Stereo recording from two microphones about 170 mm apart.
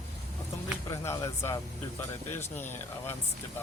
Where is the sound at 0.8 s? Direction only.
15° left (ahead or behind).